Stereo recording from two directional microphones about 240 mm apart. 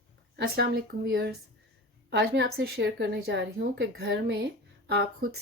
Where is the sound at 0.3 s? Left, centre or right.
Right.